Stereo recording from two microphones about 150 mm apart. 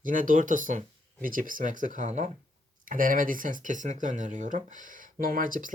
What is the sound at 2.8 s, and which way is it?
Speech, 65° right (ahead or behind).